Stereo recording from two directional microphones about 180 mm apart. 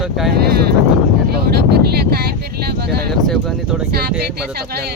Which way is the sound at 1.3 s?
60° right (ahead or behind).